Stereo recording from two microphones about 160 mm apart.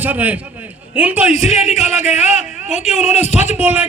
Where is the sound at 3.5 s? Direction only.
10° right (ahead or behind).